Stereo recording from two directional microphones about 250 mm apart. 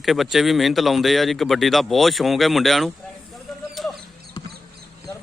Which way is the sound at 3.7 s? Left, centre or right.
Centre.